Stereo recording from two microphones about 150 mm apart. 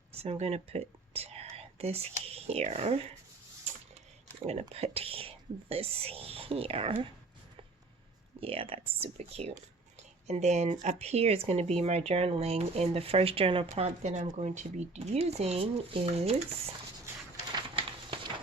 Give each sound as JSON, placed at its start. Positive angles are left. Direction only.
{"t": 0.1, "sound": "speech", "side_deg": -45}
{"t": 4.7, "sound": "speech", "side_deg": -40}
{"t": 8.4, "sound": "speech", "side_deg": -40}
{"t": 10.0, "sound": "a sound", "side_deg": -50}
{"t": 10.8, "sound": "speech", "side_deg": -45}
{"t": 17.5, "sound": "a sound", "side_deg": -30}